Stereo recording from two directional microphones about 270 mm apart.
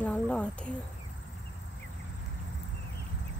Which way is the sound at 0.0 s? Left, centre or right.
Centre.